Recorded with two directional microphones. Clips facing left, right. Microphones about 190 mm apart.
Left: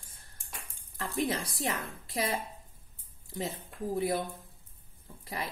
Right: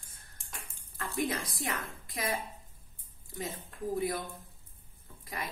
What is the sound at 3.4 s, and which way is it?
Speech, 30° left (ahead or behind).